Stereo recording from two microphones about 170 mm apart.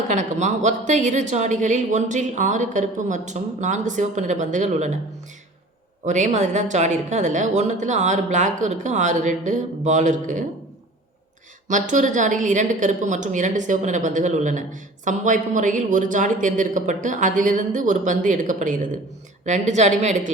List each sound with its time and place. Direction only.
0.1 s a woman's voice: 45° right (ahead or behind)
6.1 s a woman's voice: 45° right (ahead or behind)
11.7 s a woman's voice: 45° right (ahead or behind)